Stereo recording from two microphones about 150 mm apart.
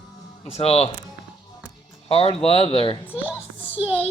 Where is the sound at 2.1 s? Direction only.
40° left (ahead or behind).